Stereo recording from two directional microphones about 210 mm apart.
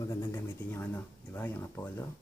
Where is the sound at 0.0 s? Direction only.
15° left (ahead or behind).